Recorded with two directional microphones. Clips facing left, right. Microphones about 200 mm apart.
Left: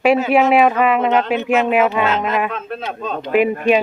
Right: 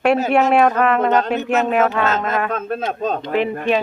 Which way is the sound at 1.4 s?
10° left (ahead or behind).